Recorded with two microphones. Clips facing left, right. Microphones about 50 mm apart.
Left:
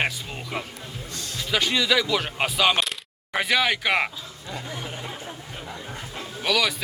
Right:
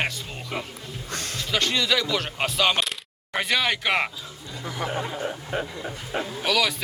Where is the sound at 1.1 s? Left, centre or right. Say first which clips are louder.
Right 7 dB; right.